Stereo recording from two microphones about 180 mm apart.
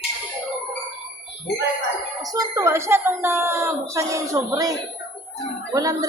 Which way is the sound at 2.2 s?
20° right (ahead or behind).